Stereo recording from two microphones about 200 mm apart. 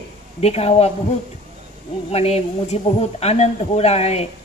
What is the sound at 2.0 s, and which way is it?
A woman's voice, 30° left (ahead or behind).